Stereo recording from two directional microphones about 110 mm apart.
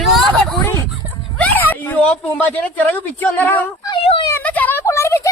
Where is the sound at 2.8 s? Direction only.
15° left (ahead or behind).